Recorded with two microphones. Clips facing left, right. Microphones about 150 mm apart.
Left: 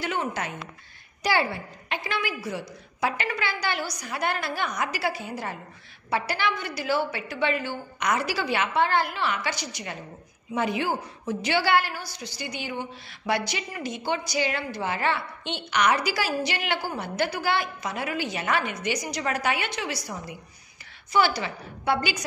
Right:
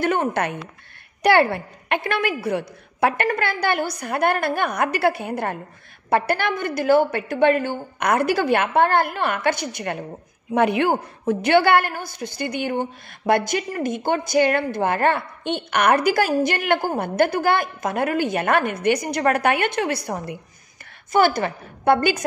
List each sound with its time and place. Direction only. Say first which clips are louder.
0.0 s a woman's voice: right 8 dB; 55° right (ahead or behind)